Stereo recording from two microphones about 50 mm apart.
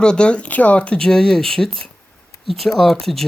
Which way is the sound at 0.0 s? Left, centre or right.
Centre.